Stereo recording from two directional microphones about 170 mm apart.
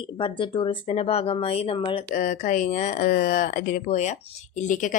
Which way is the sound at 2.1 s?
45° left (ahead or behind).